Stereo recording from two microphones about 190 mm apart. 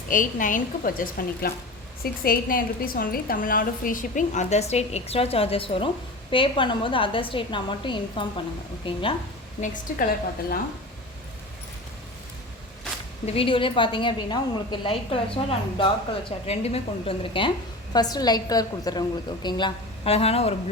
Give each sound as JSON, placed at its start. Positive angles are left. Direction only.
{"t": 0.1, "sound": "a woman's voice", "side_deg": 45}
{"t": 9.6, "sound": "a woman's voice", "side_deg": 45}
{"t": 13.2, "sound": "a woman's voice", "side_deg": 30}